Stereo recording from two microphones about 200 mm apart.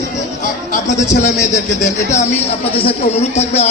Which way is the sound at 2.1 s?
35° left (ahead or behind).